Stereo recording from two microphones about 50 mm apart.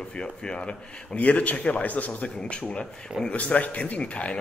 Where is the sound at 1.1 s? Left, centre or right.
Left.